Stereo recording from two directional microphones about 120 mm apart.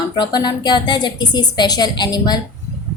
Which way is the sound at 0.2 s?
40° left (ahead or behind).